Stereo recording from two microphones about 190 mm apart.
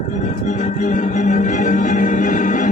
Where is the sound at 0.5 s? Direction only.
40° left (ahead or behind).